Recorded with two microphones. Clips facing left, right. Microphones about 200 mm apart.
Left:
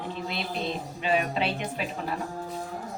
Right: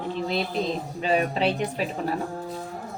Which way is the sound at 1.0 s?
40° right (ahead or behind).